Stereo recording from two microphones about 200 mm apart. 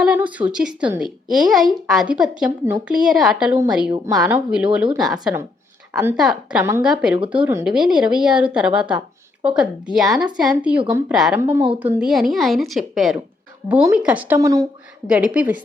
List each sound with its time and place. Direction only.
0.0 s speech: 5° right (ahead or behind)
3.9 s a woman's voice: 20° right (ahead or behind)
4.2 s a woman's voice: 5° right (ahead or behind)
15.0 s speech: 5° right (ahead or behind)